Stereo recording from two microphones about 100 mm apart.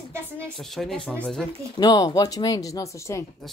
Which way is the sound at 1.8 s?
40° left (ahead or behind).